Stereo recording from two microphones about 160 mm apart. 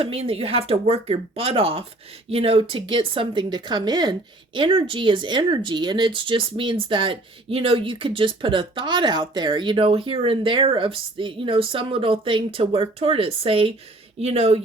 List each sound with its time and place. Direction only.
0.0 s a woman's voice: 35° right (ahead or behind)